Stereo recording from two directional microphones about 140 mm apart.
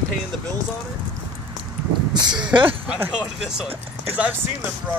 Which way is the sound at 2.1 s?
30° right (ahead or behind).